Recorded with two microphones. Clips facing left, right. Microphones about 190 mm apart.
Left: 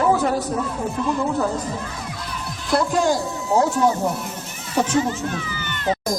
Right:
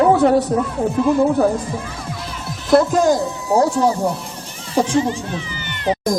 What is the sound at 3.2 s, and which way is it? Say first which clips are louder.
Speech: right 4 dB; 20° right (ahead or behind).